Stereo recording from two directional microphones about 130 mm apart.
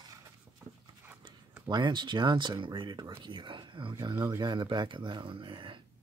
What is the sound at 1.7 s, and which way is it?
Speech, 35° right (ahead or behind).